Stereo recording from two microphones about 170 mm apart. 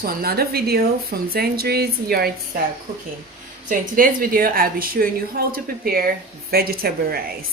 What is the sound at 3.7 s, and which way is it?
A woman's voice, 55° right (ahead or behind).